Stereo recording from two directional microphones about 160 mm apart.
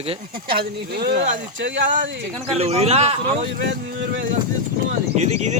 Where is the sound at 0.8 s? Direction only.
80° right.